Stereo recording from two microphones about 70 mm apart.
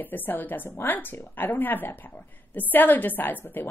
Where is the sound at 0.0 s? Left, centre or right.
Left.